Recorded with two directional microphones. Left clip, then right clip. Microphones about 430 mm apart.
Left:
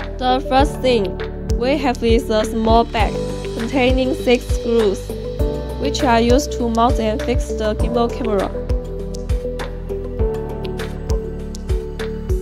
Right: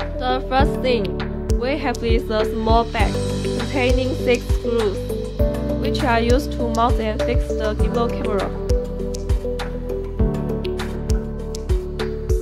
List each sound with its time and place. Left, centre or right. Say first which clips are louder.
0.2 s speech: left 4 dB; centre